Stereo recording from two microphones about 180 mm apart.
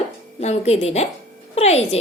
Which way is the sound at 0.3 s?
35° left (ahead or behind).